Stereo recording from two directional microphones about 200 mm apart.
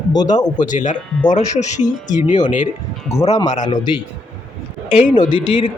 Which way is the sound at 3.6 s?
20° left (ahead or behind).